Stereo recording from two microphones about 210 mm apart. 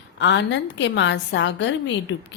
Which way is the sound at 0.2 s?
60° left (ahead or behind).